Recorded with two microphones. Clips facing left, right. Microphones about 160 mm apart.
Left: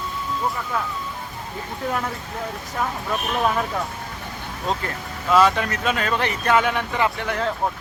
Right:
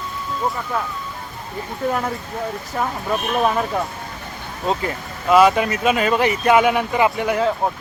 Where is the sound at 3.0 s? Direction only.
15° right (ahead or behind).